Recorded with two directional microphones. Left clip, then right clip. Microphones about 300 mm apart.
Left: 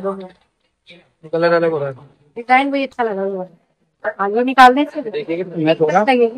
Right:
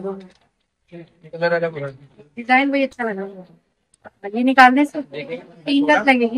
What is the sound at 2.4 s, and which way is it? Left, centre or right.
Speech, centre.